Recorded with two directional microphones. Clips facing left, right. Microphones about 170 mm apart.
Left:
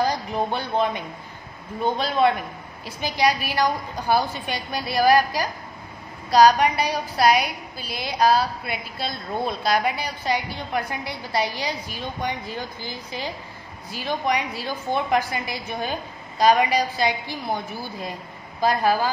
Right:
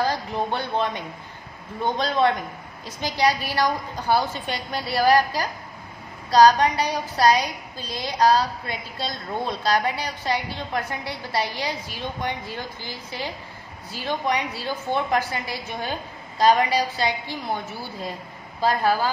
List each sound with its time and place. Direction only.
0.0 s a woman's voice: 15° left (ahead or behind)